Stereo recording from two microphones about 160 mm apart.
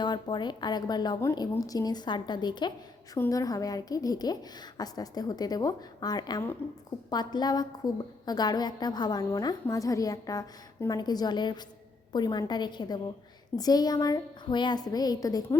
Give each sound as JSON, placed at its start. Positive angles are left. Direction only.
{"t": 0.0, "sound": "a woman's voice", "side_deg": 30}
{"t": 6.6, "sound": "a woman's voice", "side_deg": 15}
{"t": 7.1, "sound": "a woman's voice", "side_deg": 25}